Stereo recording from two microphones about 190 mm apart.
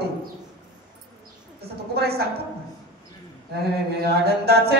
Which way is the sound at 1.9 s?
55° right (ahead or behind).